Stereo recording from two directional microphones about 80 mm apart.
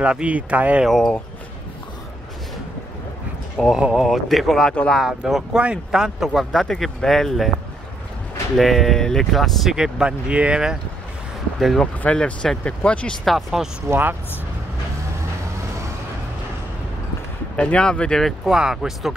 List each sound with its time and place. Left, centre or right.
0.0 s speech: centre
0.8 s speech: centre
3.5 s speech: centre
5.0 s speech: centre
8.5 s speech: centre
11.8 s speech: centre
13.2 s speech: centre
13.8 s speech: right
17.6 s speech: centre
18.5 s speech: centre